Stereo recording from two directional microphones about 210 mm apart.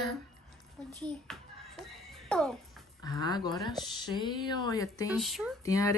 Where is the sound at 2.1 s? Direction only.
Centre (ahead or behind).